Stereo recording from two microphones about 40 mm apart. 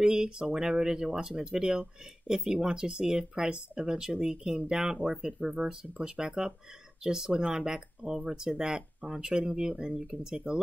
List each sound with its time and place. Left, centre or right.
0.0 s speech: centre